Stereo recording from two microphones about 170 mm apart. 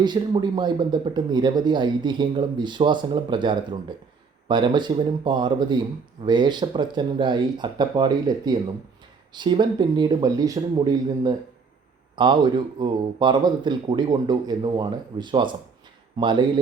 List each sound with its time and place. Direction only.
0.0 s speech: 25° right (ahead or behind)